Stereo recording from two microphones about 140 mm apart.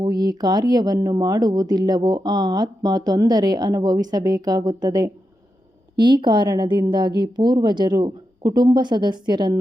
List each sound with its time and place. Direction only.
0.0 s speech: 30° right (ahead or behind)